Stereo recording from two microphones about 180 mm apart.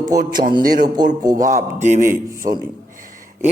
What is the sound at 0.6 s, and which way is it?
Speech, 50° right (ahead or behind).